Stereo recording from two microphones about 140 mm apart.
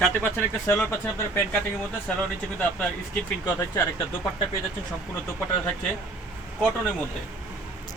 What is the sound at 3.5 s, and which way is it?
Speech, 15° left (ahead or behind).